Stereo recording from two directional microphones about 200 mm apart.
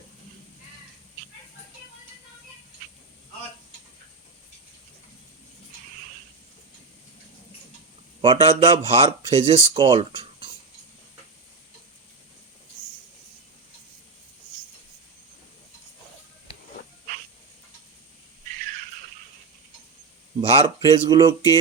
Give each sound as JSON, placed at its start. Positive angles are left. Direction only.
{"t": 8.2, "sound": "speech", "side_deg": -30}
{"t": 20.4, "sound": "speech", "side_deg": -25}